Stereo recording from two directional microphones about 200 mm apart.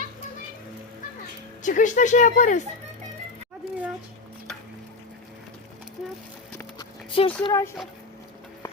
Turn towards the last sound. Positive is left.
turn(degrees=15)  # may be behind; listen again after turning